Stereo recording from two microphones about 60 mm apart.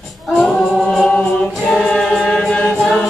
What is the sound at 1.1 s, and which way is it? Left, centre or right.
Choir, left.